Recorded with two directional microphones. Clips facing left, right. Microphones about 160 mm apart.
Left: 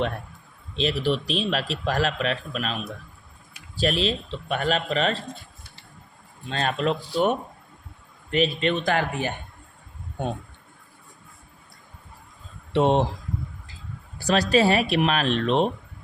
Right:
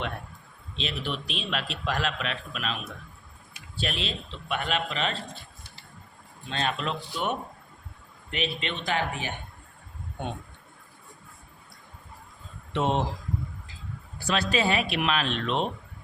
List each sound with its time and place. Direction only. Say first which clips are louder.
0.8 s speech: left 9 dB; 35° left (ahead or behind)
3.8 s speech: left 9 dB; 40° left (ahead or behind)
6.5 s speech: left 5 dB; 40° left (ahead or behind)
12.7 s speech: left 6 dB; 30° left (ahead or behind)
14.2 s speech: left 6 dB; 40° left (ahead or behind)